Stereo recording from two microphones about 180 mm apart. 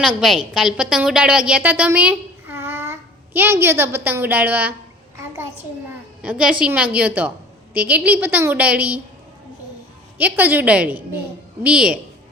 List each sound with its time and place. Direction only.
0.2 s a woman's voice: centre (ahead or behind)
6.2 s a woman's voice: 5° right (ahead or behind)
10.2 s a woman's voice: 10° right (ahead or behind)